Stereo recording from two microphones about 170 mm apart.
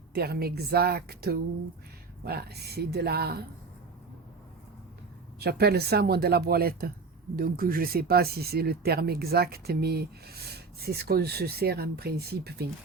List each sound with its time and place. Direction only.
0.1 s speech: 65° right (ahead or behind)
5.4 s speech: 70° right (ahead or behind)